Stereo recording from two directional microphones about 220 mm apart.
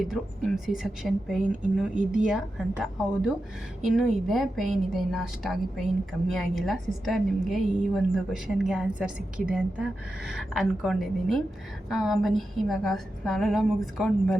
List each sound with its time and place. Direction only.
0.0 s a woman's voice: centre (ahead or behind)